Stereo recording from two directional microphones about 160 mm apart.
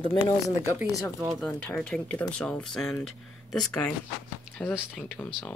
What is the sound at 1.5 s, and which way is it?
Speech, 10° left (ahead or behind).